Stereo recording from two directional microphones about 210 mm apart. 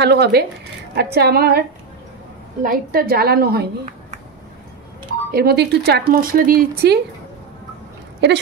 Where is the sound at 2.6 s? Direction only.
45° right (ahead or behind).